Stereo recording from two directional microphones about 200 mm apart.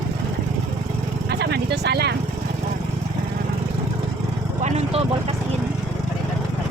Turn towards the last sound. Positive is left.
turn(degrees=-30)  # may be behind; listen again after turning